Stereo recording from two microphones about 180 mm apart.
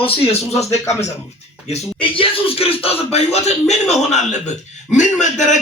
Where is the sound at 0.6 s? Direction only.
15° left (ahead or behind).